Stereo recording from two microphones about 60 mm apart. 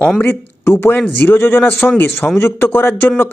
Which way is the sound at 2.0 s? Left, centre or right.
Left.